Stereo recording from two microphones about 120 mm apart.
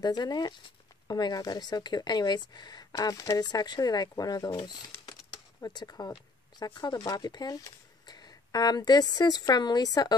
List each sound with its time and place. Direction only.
0.0 s a woman's voice: 35° left (ahead or behind)
5.6 s a woman's voice: 35° left (ahead or behind)